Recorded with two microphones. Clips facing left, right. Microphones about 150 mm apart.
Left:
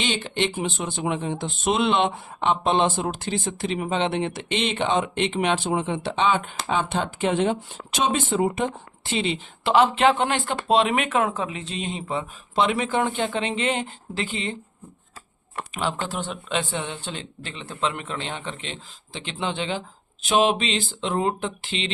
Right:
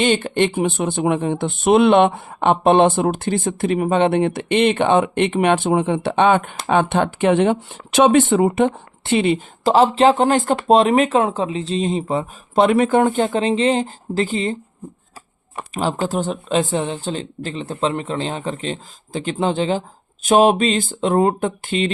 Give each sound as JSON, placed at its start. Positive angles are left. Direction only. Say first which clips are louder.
{"t": 0.0, "sound": "speech", "louder": "right 8 dB", "side_deg": -50}
{"t": 9.6, "sound": "speech", "louder": "right 5 dB", "side_deg": -35}
{"t": 15.7, "sound": "speech", "louder": "right 7 dB", "side_deg": -40}